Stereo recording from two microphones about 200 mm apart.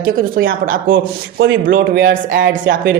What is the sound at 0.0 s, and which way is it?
Speech, 45° right (ahead or behind).